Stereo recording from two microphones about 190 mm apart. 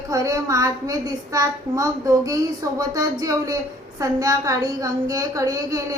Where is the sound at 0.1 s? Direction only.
15° right (ahead or behind).